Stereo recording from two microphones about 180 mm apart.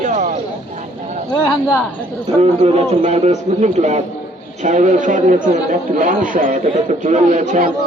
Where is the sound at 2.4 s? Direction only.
35° right (ahead or behind).